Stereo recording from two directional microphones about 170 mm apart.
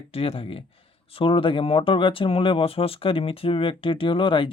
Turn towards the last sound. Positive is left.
turn(degrees=30)  # may be behind; listen again after turning